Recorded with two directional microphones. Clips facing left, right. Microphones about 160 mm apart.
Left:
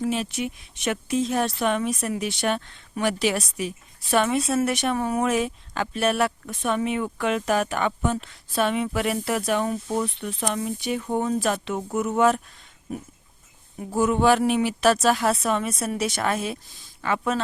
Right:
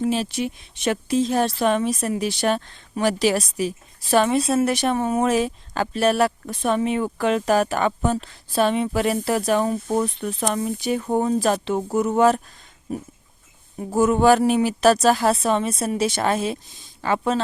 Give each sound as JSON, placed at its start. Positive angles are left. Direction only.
{"t": 0.0, "sound": "speech", "side_deg": -30}
{"t": 13.7, "sound": "speech", "side_deg": -45}